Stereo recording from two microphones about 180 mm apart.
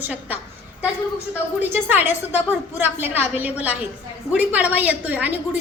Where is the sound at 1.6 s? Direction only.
10° right (ahead or behind).